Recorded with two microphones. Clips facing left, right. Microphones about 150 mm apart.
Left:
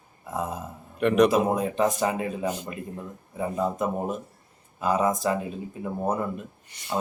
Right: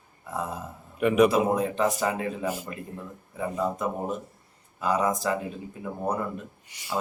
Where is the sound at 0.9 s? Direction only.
5° right (ahead or behind).